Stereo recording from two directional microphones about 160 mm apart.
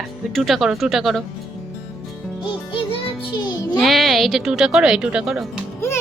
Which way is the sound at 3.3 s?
25° left (ahead or behind).